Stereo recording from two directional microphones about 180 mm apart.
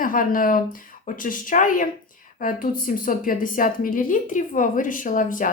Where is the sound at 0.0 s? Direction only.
50° left (ahead or behind).